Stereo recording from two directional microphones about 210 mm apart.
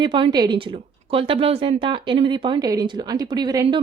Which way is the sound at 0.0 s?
20° right (ahead or behind).